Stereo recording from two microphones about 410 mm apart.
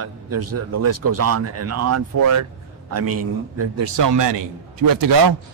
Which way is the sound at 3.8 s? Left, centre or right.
Right.